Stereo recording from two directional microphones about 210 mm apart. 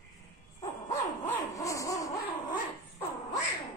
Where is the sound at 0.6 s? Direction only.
15° left (ahead or behind).